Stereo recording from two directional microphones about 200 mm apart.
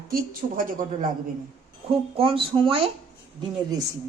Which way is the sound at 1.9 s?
25° right (ahead or behind).